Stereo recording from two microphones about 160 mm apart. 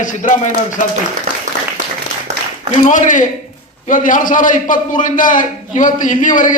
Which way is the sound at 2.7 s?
50° left (ahead or behind).